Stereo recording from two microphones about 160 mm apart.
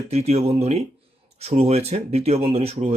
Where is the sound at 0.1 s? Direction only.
40° right (ahead or behind).